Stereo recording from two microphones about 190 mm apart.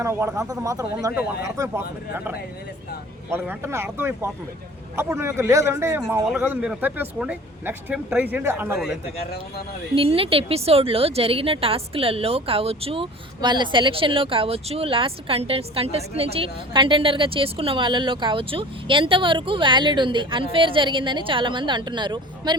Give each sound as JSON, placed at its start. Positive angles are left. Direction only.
{"t": 0.0, "sound": "speech", "side_deg": -15}
{"t": 9.1, "sound": "speech", "side_deg": 55}
{"t": 9.9, "sound": "a woman's voice", "side_deg": -30}